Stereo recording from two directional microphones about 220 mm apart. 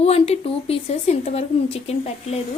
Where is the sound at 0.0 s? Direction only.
30° left (ahead or behind).